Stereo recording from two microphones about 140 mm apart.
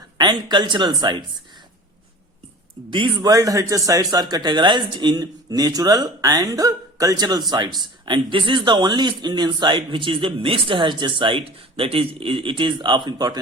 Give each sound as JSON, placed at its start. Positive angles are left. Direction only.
{"t": 0.2, "sound": "speech", "side_deg": -30}
{"t": 2.9, "sound": "speech", "side_deg": -35}